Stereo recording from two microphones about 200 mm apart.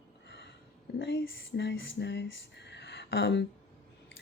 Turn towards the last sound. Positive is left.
turn(degrees=60)  # may be behind; listen again after turning